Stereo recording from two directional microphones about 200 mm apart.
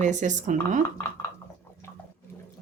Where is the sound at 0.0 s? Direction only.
35° right (ahead or behind).